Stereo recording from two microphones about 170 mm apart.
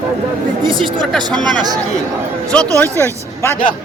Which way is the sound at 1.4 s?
25° right (ahead or behind).